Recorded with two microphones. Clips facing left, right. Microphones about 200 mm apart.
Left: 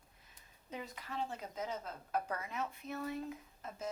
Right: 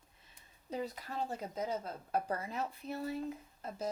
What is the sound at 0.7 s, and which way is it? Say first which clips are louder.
Speech: right 6 dB; 35° right (ahead or behind).